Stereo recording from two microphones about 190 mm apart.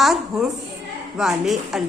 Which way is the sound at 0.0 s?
Centre (ahead or behind).